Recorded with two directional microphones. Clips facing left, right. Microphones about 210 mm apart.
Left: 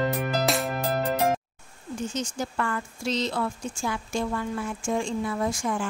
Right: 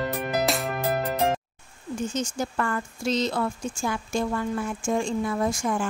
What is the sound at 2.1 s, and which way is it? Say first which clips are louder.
Speech: right 2 dB; 45° right (ahead or behind).